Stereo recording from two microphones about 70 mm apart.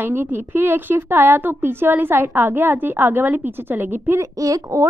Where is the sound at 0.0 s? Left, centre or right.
Right.